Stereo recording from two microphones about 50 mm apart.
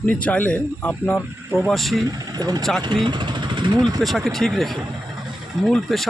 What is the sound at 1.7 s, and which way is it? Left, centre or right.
Speech, centre.